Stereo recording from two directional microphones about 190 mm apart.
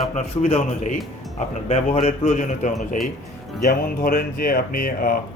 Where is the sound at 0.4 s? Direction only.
35° left (ahead or behind).